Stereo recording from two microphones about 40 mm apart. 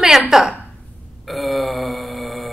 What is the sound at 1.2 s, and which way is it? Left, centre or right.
Burping, centre.